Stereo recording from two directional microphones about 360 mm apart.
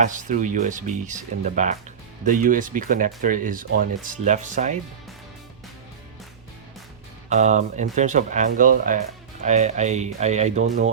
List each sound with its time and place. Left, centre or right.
0.0 s speech: right
7.3 s speech: centre